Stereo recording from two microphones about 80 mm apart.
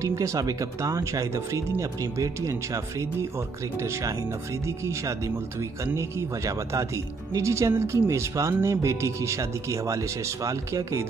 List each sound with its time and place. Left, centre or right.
0.0 s speech: right